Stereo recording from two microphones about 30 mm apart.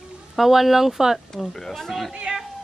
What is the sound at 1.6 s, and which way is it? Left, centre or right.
Speech, centre.